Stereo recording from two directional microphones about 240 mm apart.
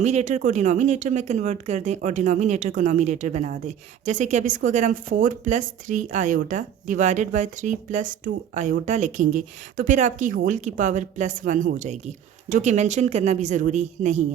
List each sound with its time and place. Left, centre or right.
0.0 s speech: right